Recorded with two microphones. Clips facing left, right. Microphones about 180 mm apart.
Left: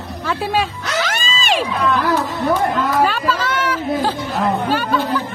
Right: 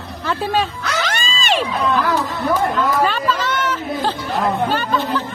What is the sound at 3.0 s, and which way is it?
Speech, 10° left (ahead or behind).